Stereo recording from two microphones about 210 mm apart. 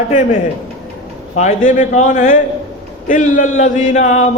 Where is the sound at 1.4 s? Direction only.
35° left (ahead or behind).